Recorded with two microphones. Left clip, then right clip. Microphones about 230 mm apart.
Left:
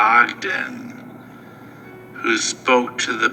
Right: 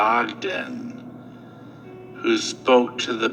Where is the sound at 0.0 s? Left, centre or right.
Centre.